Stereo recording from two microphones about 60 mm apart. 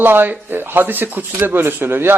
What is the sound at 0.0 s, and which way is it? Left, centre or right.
Speech, right.